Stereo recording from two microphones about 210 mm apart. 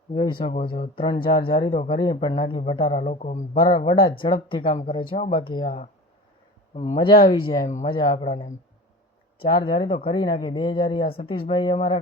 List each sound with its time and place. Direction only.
0.1 s a man's voice: 25° left (ahead or behind)